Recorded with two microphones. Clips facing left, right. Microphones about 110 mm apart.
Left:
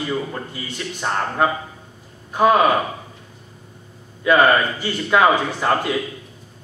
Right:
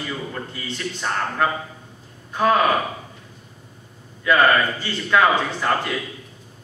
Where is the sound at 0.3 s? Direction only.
15° left (ahead or behind).